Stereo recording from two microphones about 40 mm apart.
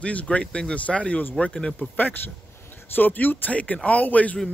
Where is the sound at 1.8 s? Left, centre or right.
Left.